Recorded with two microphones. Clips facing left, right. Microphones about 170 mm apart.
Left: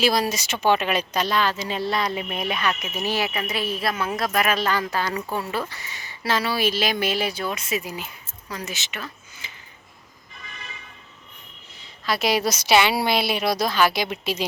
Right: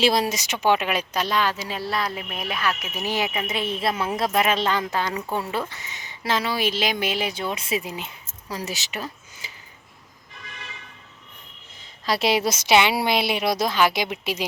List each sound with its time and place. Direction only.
0.0 s speech: 25° right (ahead or behind)
8.5 s speech: 35° right (ahead or behind)
9.4 s a sound: 40° right (ahead or behind)
12.0 s speech: 30° right (ahead or behind); by 14.4 s 15° right (ahead or behind)